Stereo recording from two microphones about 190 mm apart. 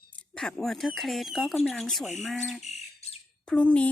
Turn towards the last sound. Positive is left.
turn(degrees=5)  # may be behind; listen again after turning